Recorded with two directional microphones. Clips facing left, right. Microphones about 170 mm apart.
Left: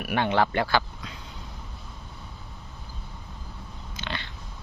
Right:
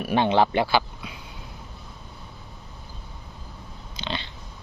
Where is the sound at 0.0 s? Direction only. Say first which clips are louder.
Right 4 dB; 25° right (ahead or behind).